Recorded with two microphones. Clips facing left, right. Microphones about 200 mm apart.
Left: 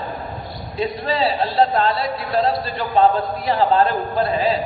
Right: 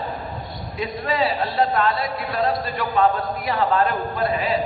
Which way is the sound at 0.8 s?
30° left (ahead or behind).